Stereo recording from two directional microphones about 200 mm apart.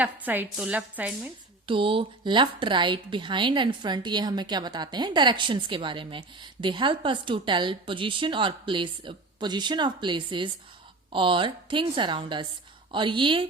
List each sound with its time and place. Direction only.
0.0 s a woman's voice: 10° right (ahead or behind)
1.6 s a woman's voice: 25° right (ahead or behind)